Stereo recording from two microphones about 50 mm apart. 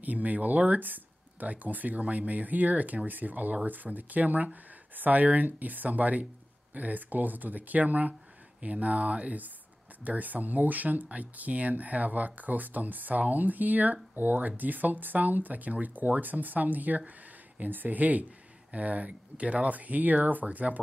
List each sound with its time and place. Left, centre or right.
0.0 s speech: right